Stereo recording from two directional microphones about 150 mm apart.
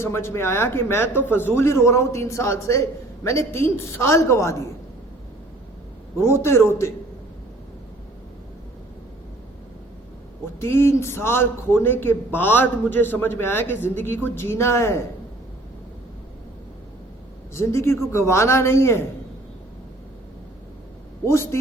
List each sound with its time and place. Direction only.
0.0 s a man's voice: 15° left (ahead or behind)
6.1 s a man's voice: 15° left (ahead or behind)
10.6 s a man's voice: 15° left (ahead or behind)
17.5 s a man's voice: 15° left (ahead or behind)
21.2 s a man's voice: 15° left (ahead or behind)